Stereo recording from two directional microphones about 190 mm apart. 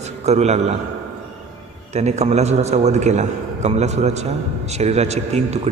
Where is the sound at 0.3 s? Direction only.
35° right (ahead or behind).